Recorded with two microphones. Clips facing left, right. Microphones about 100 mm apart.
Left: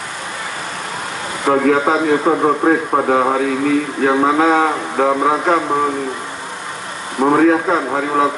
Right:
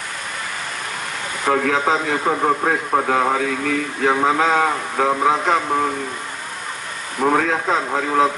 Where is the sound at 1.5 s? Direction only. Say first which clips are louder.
Left 4 dB; 20° left (ahead or behind).